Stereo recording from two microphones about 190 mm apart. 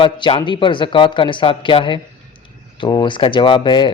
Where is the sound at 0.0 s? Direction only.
25° left (ahead or behind).